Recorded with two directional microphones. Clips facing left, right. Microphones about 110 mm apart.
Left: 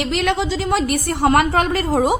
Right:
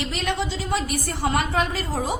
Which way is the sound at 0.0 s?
70° left (ahead or behind).